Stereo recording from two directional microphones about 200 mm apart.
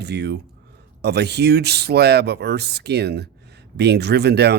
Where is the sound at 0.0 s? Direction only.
55° right (ahead or behind).